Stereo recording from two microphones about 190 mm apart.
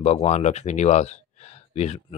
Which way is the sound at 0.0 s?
35° left (ahead or behind).